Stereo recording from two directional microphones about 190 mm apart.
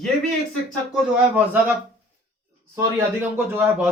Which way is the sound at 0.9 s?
10° right (ahead or behind).